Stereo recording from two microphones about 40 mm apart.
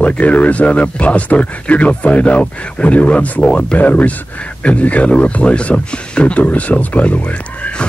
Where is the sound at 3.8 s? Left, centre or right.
Left.